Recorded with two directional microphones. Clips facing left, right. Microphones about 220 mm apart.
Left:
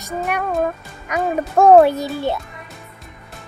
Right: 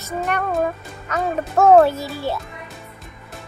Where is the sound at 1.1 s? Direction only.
15° left (ahead or behind).